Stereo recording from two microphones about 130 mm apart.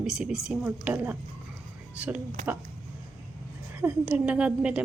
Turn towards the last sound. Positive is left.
turn(degrees=-10)  # may be behind; listen again after turning